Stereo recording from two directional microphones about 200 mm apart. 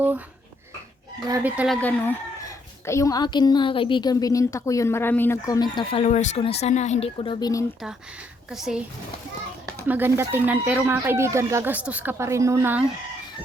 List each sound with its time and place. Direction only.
1.5 s speech: 5° right (ahead or behind); by 7.6 s 20° left (ahead or behind)
8.4 s a child's voice: 5° right (ahead or behind)
9.8 s speech: 10° right (ahead or behind)